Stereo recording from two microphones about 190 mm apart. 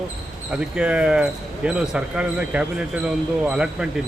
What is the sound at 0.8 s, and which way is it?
Speech, 5° right (ahead or behind).